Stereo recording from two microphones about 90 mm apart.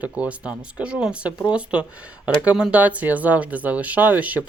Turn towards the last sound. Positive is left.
turn(degrees=-15)  # may be behind; listen again after turning